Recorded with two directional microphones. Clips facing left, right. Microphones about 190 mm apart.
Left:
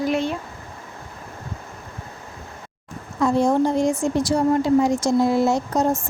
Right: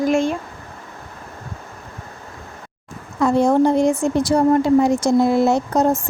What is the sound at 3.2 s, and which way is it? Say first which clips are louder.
A woman's voice: right 3 dB; 60° right (ahead or behind).